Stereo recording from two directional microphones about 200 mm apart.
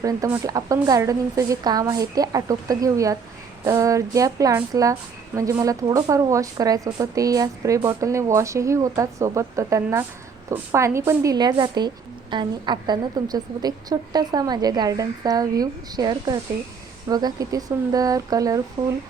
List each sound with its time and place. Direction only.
0.0 s a woman's voice: 15° right (ahead or behind)